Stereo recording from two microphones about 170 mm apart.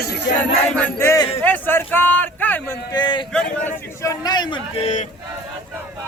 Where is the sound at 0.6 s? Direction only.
10° left (ahead or behind).